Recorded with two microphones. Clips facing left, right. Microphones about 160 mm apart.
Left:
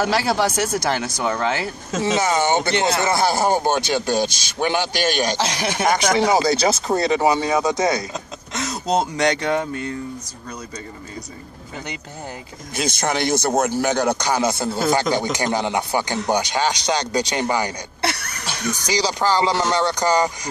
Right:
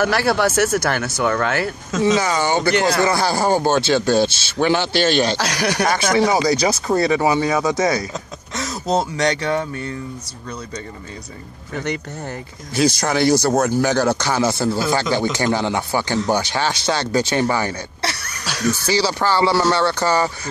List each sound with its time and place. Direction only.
0.0 s speech: 15° left (ahead or behind)
12.7 s speech: 20° left (ahead or behind)